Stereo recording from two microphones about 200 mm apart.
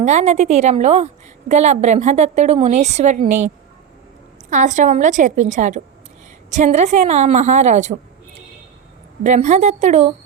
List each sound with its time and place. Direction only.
0.0 s a woman's voice: 35° right (ahead or behind)
9.2 s a woman's voice: 35° right (ahead or behind)